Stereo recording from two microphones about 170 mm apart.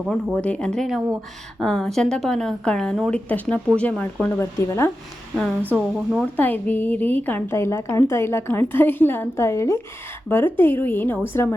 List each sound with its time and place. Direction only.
0.1 s a woman's voice: 5° left (ahead or behind)
5.4 s a woman's voice: centre (ahead or behind)